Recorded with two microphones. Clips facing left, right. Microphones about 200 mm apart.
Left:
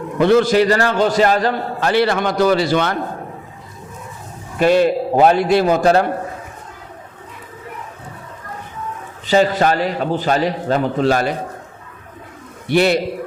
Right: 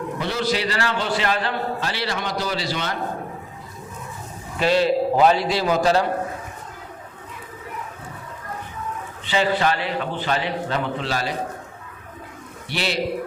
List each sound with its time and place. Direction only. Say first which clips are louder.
0.2 s a man's voice: left 13 dB; 50° left (ahead or behind)
4.6 s a man's voice: left 5 dB; 50° left (ahead or behind)
9.2 s a man's voice: left 6 dB; 40° left (ahead or behind)
12.6 s a man's voice: left 12 dB; 50° left (ahead or behind)